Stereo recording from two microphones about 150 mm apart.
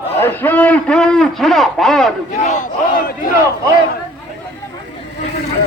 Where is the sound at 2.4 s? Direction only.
55° left (ahead or behind).